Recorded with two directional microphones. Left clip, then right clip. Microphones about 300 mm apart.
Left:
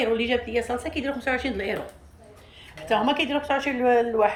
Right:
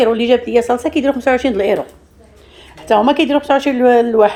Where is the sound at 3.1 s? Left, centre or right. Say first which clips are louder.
Right 11 dB; centre.